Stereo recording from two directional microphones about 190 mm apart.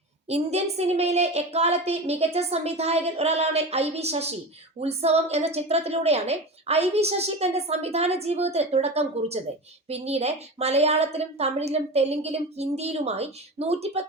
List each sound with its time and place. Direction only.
0.3 s a woman's voice: 35° right (ahead or behind)